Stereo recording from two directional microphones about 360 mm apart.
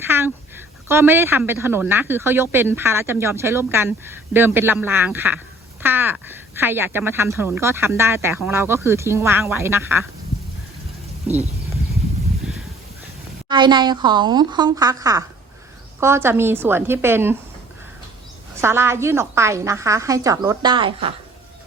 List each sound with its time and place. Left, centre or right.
0.0 s speech: centre
11.3 s speech: centre
13.5 s speech: centre
18.6 s speech: centre